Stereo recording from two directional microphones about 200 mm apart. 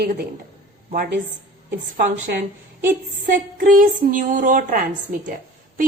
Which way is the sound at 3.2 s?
40° right (ahead or behind).